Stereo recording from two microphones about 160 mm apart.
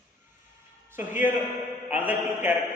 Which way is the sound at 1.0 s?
10° right (ahead or behind).